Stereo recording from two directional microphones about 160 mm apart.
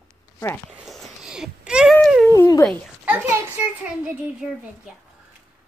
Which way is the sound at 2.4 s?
15° left (ahead or behind).